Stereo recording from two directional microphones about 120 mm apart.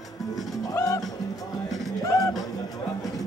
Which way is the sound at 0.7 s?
30° left (ahead or behind).